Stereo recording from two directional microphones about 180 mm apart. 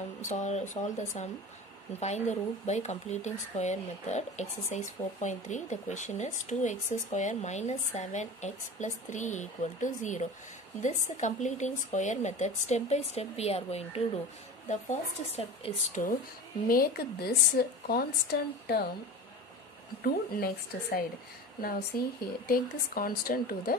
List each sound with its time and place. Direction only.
0.2 s speech: 40° left (ahead or behind)
16.6 s speech: 55° left (ahead or behind)
20.0 s speech: 55° left (ahead or behind)